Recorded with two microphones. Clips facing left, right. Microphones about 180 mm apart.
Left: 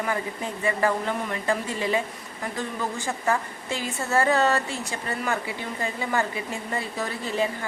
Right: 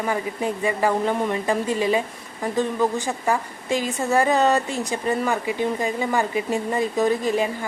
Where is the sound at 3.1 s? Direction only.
15° right (ahead or behind).